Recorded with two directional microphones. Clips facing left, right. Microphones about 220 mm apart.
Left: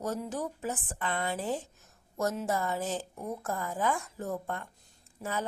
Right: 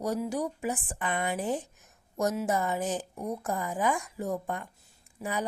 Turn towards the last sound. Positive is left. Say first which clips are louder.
# right 2 dB
turn(degrees=-15)  # may be behind; listen again after turning